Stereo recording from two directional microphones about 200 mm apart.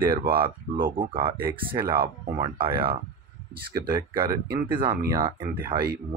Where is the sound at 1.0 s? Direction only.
25° right (ahead or behind).